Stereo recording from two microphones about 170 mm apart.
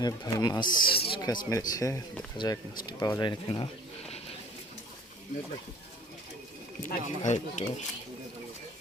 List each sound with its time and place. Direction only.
0.0 s speech: 20° left (ahead or behind)
2.4 s speech: 30° left (ahead or behind)
6.8 s speech: 45° left (ahead or behind)